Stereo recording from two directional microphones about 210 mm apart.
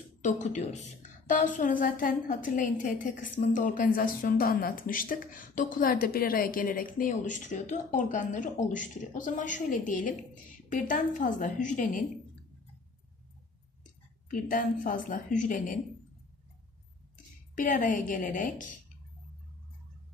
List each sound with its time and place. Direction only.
0.2 s a woman's voice: 35° left (ahead or behind)
14.3 s a woman's voice: 40° left (ahead or behind)
17.6 s a woman's voice: 40° left (ahead or behind)